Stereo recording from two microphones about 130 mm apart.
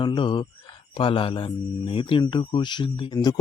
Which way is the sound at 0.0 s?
35° left (ahead or behind).